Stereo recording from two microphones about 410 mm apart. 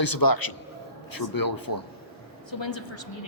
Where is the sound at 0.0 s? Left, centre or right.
Left.